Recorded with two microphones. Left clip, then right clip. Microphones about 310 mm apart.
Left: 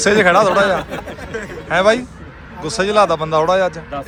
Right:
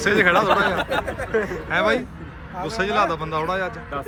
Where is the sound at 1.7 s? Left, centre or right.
Centre.